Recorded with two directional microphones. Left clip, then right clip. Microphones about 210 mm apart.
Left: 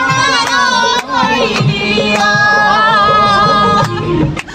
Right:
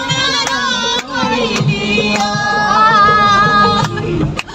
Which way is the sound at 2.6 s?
25° left (ahead or behind).